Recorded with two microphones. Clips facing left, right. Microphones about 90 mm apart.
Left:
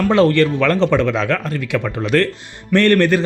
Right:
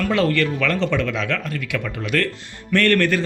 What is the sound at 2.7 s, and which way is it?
Speech, 20° left (ahead or behind).